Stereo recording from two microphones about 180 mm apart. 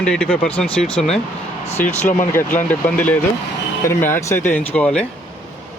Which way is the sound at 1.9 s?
40° left (ahead or behind).